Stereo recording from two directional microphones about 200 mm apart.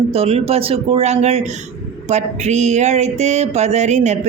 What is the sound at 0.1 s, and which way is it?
Mantra, 30° right (ahead or behind).